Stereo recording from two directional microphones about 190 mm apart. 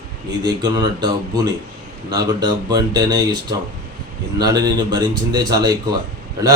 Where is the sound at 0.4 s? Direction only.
20° right (ahead or behind).